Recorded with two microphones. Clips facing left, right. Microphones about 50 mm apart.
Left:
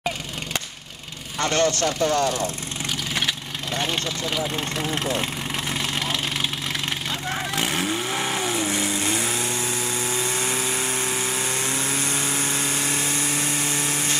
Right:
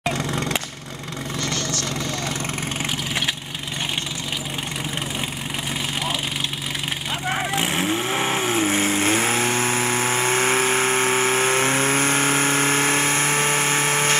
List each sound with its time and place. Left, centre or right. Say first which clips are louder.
1.4 s speech: left 8 dB; left
7.2 s vehicle: right 4 dB; right